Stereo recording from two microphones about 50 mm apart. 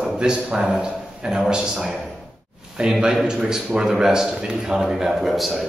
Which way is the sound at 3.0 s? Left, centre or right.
Centre.